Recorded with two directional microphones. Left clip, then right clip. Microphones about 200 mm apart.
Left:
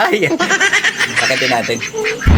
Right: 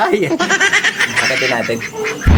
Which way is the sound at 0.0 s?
45° left (ahead or behind).